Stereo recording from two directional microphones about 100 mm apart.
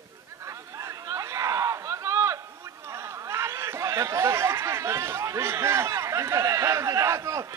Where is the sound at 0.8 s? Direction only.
30° right (ahead or behind).